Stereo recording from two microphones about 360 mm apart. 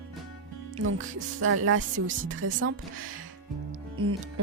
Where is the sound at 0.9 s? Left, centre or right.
Right.